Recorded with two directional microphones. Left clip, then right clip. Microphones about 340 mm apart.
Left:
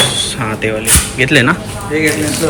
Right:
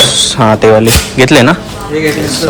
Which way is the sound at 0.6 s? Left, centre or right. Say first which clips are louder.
Right 6 dB; right.